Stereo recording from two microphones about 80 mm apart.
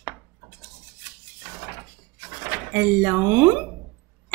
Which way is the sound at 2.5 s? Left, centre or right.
Right.